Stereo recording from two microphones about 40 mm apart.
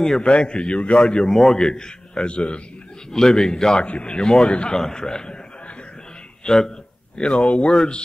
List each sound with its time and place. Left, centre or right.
0.0 s a man's voice: centre
1.2 s speech: centre
1.7 s a man's voice: centre
3.1 s speech: centre
3.8 s a man's voice: left
6.4 s speech: centre
7.2 s a man's voice: left
7.6 s speech: centre